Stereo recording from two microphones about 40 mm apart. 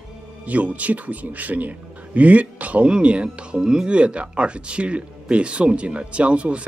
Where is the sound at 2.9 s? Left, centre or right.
Right.